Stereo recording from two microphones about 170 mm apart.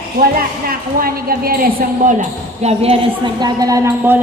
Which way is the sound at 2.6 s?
35° right (ahead or behind).